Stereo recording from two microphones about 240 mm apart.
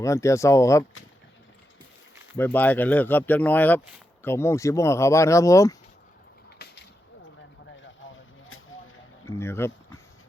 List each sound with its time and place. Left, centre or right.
0.0 s speech: centre
2.4 s speech: centre
8.0 s vehicle: left
9.2 s a sound: centre